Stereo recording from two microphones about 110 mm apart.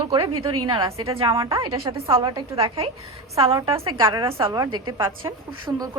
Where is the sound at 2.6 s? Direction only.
60° right (ahead or behind).